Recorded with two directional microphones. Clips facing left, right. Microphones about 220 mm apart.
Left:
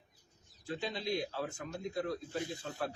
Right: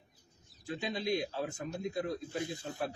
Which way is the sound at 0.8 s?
20° right (ahead or behind).